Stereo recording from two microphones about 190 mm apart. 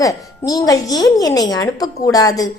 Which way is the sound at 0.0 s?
20° left (ahead or behind).